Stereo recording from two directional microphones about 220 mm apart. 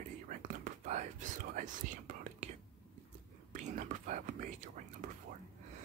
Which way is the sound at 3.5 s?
35° right (ahead or behind).